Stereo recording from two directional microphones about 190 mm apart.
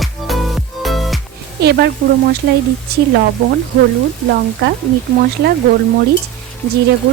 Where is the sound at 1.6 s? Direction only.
60° right (ahead or behind).